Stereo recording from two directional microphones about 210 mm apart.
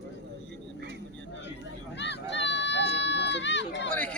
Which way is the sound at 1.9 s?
55° left (ahead or behind).